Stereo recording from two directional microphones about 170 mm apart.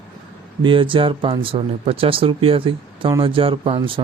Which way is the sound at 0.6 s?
30° right (ahead or behind).